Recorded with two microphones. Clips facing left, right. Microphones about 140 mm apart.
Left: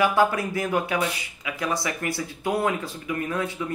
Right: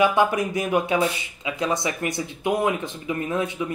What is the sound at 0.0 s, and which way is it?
Speech, 20° right (ahead or behind).